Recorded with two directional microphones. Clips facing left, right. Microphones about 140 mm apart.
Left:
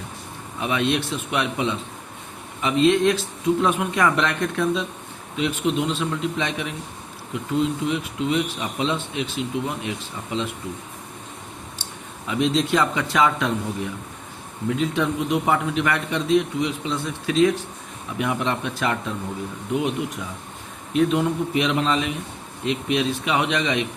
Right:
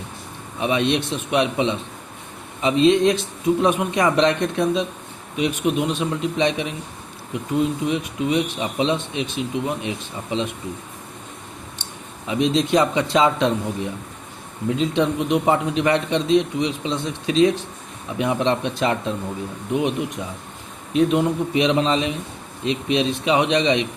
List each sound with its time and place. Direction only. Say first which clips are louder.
0.6 s a man's voice: right 2 dB; 20° right (ahead or behind)
7.9 s a man's voice: right 2 dB; 20° right (ahead or behind)
12.3 s a man's voice: right 2 dB; 20° right (ahead or behind)
14.7 s a man's voice: right 3 dB; 20° right (ahead or behind)